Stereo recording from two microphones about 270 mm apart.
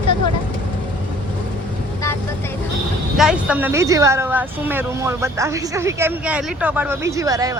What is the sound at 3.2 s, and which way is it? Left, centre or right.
Speech, centre.